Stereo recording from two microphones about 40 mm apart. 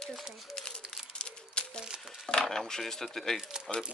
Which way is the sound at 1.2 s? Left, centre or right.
Left.